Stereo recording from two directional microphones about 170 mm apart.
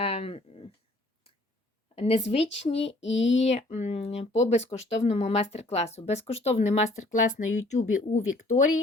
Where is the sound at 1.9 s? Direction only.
35° left (ahead or behind).